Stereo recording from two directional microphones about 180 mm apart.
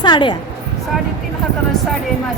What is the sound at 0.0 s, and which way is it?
Speech, 25° left (ahead or behind).